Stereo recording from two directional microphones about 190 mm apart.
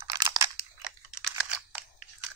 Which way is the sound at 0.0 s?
20° right (ahead or behind).